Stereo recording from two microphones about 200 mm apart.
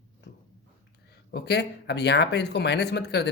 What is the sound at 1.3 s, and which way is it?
Speech, 55° left (ahead or behind).